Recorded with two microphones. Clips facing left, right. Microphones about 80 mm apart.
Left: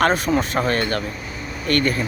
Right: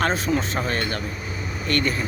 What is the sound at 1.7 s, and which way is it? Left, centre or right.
Speech, left.